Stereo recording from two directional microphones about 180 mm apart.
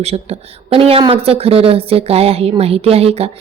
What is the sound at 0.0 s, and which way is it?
A woman's voice, 35° right (ahead or behind).